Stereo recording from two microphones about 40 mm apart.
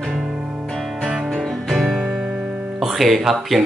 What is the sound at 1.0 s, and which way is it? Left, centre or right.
Music, centre.